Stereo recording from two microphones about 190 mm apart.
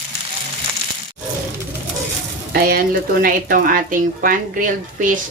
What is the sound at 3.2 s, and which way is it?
Speech, 45° right (ahead or behind).